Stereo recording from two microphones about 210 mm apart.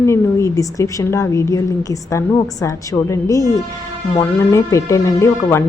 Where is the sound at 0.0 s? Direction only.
15° left (ahead or behind).